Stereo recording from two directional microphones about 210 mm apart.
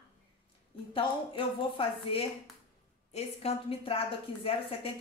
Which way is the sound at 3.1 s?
30° left (ahead or behind).